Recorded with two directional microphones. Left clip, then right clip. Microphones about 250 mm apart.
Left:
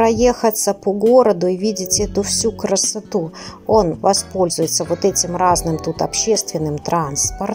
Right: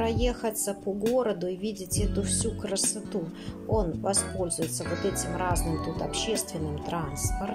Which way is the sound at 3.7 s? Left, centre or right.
Left.